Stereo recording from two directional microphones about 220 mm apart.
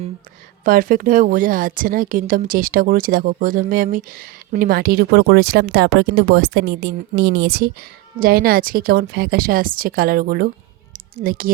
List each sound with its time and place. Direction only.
0.6 s speech: 40° right (ahead or behind)